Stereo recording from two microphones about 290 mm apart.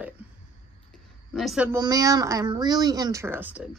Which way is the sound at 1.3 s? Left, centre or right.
Centre.